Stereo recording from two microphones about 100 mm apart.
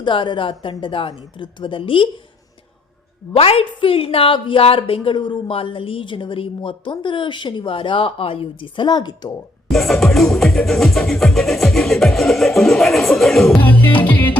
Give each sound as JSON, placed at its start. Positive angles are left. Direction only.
{"t": 0.0, "sound": "a woman's voice", "side_deg": 55}
{"t": 3.3, "sound": "a woman's voice", "side_deg": 70}
{"t": 9.6, "sound": "music", "side_deg": 5}
{"t": 13.5, "sound": "music", "side_deg": 15}